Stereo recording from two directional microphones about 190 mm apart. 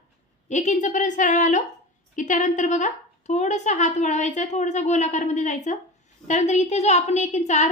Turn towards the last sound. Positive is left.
turn(degrees=35)  # may be behind; listen again after turning